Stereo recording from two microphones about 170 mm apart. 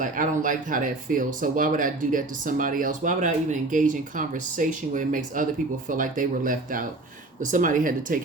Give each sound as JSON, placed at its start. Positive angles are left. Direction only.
{"t": 0.0, "sound": "speech", "side_deg": -50}